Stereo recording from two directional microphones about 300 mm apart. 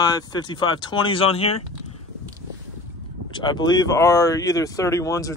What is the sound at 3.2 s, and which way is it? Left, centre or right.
Speech, centre.